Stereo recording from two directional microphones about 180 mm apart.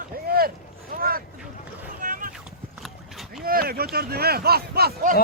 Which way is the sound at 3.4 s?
55° right (ahead or behind).